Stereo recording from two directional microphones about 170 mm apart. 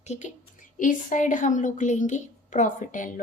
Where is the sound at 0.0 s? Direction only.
45° left (ahead or behind).